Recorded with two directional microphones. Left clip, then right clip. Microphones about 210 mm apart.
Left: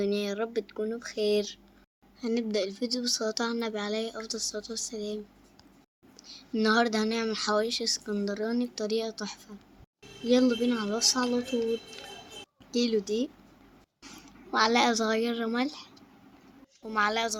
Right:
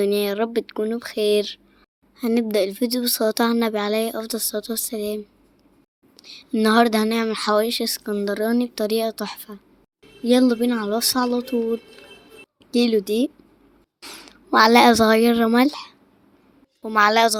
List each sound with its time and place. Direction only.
0.0 s speech: 45° right (ahead or behind)
6.2 s speech: 40° right (ahead or behind)
12.7 s speech: 35° right (ahead or behind)